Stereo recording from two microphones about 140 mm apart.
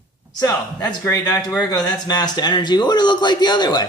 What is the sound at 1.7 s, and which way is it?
A man's voice, 30° left (ahead or behind).